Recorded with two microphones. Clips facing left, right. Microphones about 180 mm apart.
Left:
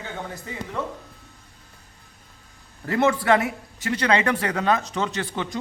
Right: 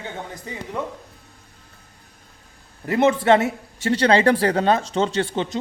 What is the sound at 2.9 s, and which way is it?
A man's voice, 20° right (ahead or behind).